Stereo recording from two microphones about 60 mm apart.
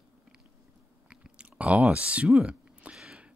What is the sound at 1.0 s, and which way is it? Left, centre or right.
Chewing, right.